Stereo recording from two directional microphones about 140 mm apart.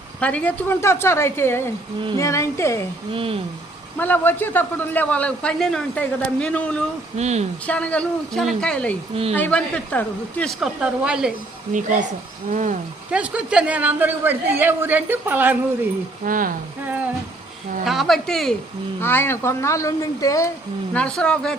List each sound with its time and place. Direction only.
0.2 s speech: 10° left (ahead or behind)
3.1 s speech: 40° right (ahead or behind)
3.9 s speech: 15° left (ahead or behind)
7.2 s speech: 50° right (ahead or behind)
7.7 s speech: 10° left (ahead or behind)
10.6 s speech: 5° right (ahead or behind)
11.7 s speech: 60° right (ahead or behind)
13.1 s speech: 10° right (ahead or behind)
16.2 s speech: 80° right
17.8 s speech: centre (ahead or behind)
19.0 s speech: 15° left (ahead or behind)
20.9 s speech: 5° left (ahead or behind)